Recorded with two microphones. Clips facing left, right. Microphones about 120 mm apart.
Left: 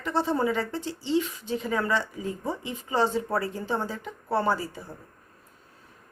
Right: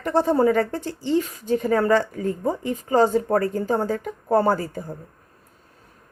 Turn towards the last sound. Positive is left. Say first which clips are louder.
# right 5 dB
turn(degrees=-50)  # may be behind; listen again after turning